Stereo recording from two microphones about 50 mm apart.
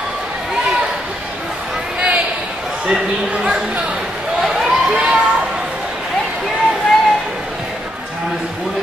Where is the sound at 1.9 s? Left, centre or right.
Right.